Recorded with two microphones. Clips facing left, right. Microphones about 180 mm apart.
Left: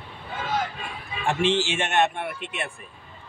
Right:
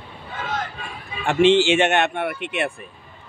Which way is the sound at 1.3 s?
75° right (ahead or behind).